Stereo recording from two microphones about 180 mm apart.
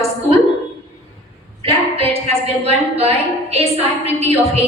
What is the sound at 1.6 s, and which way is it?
A woman's voice, 35° right (ahead or behind).